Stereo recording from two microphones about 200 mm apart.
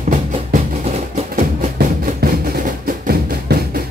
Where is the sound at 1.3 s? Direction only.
35° right (ahead or behind).